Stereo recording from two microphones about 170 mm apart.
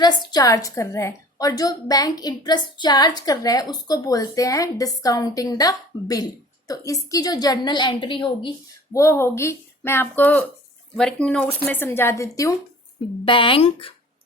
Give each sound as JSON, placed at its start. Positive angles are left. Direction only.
{"t": 0.0, "sound": "a woman's voice", "side_deg": 25}
{"t": 8.9, "sound": "speech", "side_deg": 15}
{"t": 13.2, "sound": "speech", "side_deg": 30}